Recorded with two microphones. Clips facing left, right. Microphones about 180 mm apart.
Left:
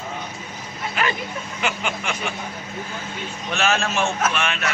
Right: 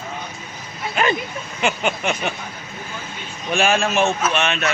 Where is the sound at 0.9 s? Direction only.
25° right (ahead or behind).